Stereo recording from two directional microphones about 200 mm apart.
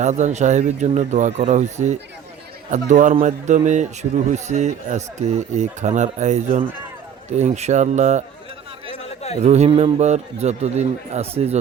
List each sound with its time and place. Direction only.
0.0 s speech: 35° right (ahead or behind)
9.4 s speech: 35° right (ahead or behind)